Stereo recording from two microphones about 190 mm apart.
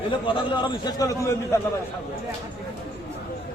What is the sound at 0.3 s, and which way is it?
A man's voice, 25° left (ahead or behind).